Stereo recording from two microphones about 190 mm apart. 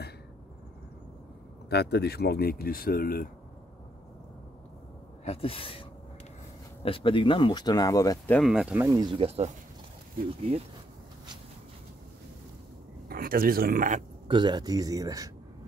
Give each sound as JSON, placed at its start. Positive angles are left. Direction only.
{"t": 1.7, "sound": "speech", "side_deg": 60}
{"t": 5.2, "sound": "speech", "side_deg": 30}
{"t": 8.3, "sound": "speech", "side_deg": 0}
{"t": 8.9, "sound": "speech", "side_deg": -25}
{"t": 13.1, "sound": "speech", "side_deg": -50}
{"t": 14.2, "sound": "speech", "side_deg": -25}